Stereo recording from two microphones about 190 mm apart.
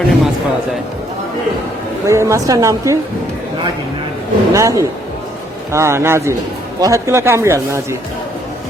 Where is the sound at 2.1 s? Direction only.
15° right (ahead or behind).